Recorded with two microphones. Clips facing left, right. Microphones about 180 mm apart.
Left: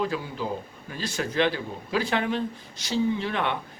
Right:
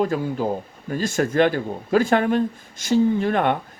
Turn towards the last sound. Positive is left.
turn(degrees=-50)  # may be behind; listen again after turning